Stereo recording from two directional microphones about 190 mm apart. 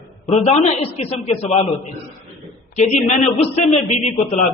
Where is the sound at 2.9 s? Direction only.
40° left (ahead or behind).